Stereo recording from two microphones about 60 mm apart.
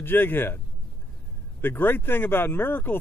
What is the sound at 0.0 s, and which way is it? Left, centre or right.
Speech, left.